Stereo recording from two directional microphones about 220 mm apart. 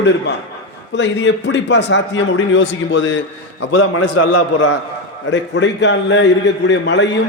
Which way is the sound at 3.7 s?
85° left.